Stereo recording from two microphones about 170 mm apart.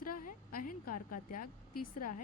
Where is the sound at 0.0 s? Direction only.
55° left (ahead or behind).